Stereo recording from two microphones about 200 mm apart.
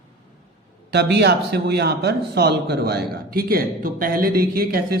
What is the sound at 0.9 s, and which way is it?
Speech, 55° right (ahead or behind).